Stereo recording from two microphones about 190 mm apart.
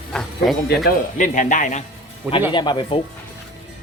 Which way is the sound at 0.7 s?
50° left (ahead or behind).